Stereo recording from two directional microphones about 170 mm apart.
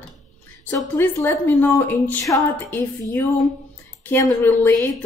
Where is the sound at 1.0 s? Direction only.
15° left (ahead or behind).